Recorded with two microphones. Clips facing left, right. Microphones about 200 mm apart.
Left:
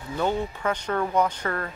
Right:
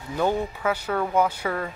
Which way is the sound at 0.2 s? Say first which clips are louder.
Right 2 dB; 5° right (ahead or behind).